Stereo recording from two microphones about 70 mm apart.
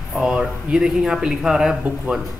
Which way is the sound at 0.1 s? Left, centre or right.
Centre.